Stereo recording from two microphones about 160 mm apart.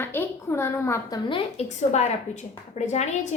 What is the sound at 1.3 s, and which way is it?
A woman's voice, 45° left (ahead or behind).